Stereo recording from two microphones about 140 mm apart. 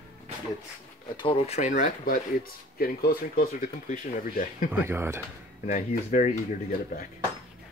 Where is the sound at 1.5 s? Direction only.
60° left (ahead or behind).